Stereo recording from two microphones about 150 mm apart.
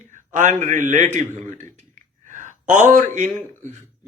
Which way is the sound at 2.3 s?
60° right (ahead or behind).